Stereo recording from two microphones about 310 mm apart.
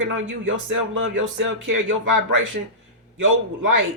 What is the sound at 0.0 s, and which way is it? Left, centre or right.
Speech, right.